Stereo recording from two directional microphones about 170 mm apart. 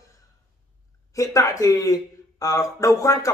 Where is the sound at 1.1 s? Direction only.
20° left (ahead or behind).